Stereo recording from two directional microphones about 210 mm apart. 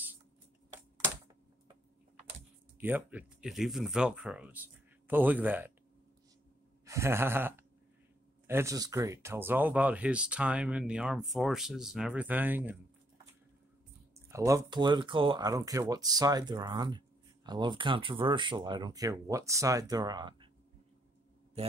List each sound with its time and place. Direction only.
2.8 s speech: 10° right (ahead or behind)
6.8 s gasp: 15° right (ahead or behind)
8.5 s speech: 15° right (ahead or behind)
14.3 s speech: 15° right (ahead or behind)